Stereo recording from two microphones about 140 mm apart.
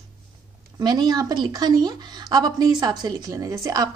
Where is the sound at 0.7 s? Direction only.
30° right (ahead or behind).